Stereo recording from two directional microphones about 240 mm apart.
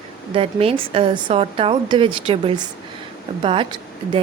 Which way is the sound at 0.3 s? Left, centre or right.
Right.